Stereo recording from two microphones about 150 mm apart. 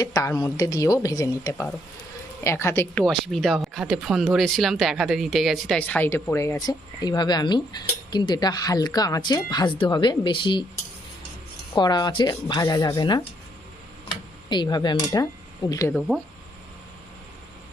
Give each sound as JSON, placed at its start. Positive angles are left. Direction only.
{"t": 0.0, "sound": "speech", "side_deg": 25}
{"t": 2.9, "sound": "speech", "side_deg": 5}
{"t": 5.8, "sound": "speech", "side_deg": 10}
{"t": 11.7, "sound": "speech", "side_deg": 30}
{"t": 15.9, "sound": "speech", "side_deg": 5}